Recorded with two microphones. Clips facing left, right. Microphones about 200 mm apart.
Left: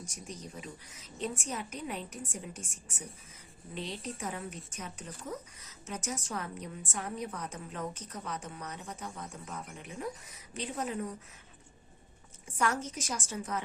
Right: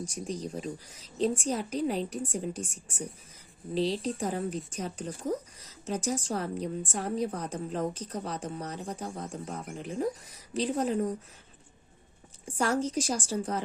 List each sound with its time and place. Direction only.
0.0 s speech: 35° right (ahead or behind)
12.5 s speech: 30° right (ahead or behind)